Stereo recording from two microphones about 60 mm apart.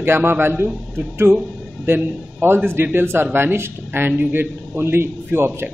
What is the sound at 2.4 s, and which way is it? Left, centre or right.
A man's voice, right.